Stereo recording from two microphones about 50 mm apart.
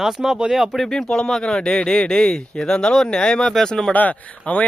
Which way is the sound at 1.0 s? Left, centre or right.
Left.